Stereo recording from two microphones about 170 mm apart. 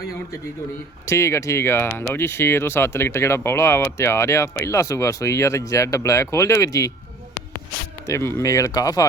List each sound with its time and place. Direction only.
1.0 s speech: 15° left (ahead or behind)
8.0 s speech: 15° left (ahead or behind)